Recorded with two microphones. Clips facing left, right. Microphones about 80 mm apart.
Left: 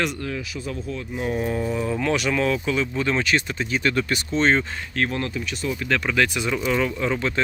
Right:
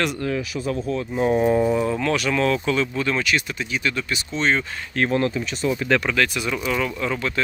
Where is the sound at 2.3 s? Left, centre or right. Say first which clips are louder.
Right 2 dB; centre.